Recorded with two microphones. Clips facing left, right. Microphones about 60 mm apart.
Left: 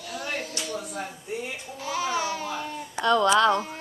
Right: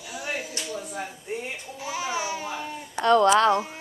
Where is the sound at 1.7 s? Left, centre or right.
Centre.